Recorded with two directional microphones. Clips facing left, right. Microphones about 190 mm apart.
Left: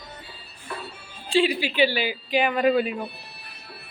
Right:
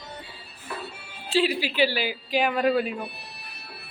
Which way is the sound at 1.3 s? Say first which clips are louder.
Left 2 dB; 5° right (ahead or behind).